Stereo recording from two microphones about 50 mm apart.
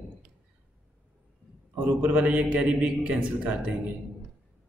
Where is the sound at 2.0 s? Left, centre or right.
Right.